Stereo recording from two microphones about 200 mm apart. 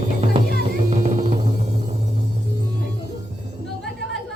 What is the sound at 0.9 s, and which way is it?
Music, 40° right (ahead or behind).